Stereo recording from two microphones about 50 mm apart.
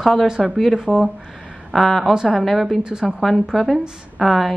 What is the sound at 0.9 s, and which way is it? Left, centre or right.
Speech, centre.